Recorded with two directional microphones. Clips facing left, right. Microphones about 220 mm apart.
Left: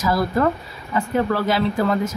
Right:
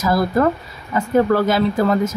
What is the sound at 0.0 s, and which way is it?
Speech, 45° right (ahead or behind).